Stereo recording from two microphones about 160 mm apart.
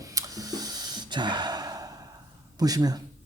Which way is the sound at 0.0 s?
20° right (ahead or behind).